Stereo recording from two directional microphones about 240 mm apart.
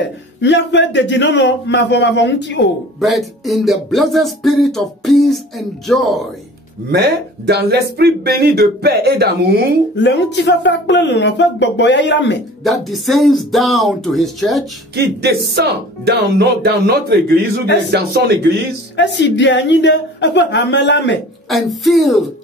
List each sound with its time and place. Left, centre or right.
0.4 s speech: left
3.0 s speech: centre
6.9 s speech: right
9.9 s speech: left
12.6 s speech: centre
15.0 s speech: right
18.9 s speech: left
21.5 s speech: centre